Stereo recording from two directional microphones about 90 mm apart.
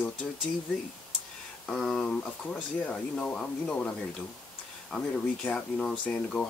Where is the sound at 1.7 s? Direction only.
10° left (ahead or behind).